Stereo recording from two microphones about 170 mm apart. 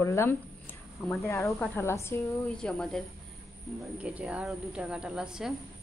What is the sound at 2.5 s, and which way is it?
Speech, 5° left (ahead or behind).